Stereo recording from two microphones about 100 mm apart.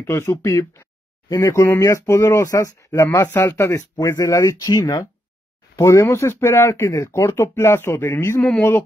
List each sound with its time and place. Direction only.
0.0 s speech: 25° left (ahead or behind)